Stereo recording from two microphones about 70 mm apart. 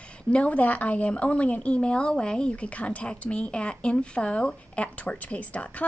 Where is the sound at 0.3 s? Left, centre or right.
Centre.